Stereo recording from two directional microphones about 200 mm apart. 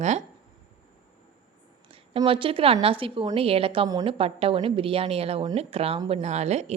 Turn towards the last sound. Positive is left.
turn(degrees=-35)  # may be behind; listen again after turning